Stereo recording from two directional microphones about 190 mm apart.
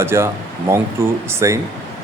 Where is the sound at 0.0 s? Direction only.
15° right (ahead or behind).